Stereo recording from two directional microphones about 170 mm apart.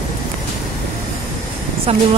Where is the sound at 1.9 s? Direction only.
35° right (ahead or behind).